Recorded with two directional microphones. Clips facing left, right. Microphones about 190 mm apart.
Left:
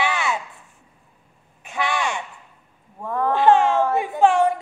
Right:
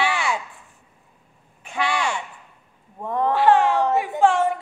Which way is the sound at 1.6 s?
20° left (ahead or behind).